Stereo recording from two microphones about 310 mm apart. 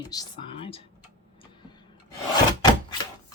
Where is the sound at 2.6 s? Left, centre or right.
Centre.